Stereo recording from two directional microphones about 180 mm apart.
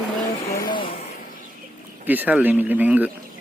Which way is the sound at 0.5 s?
25° left (ahead or behind).